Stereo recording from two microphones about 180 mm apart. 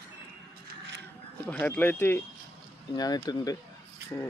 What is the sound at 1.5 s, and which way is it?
Speech, 10° left (ahead or behind).